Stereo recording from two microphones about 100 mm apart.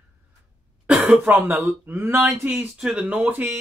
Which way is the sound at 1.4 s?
20° right (ahead or behind).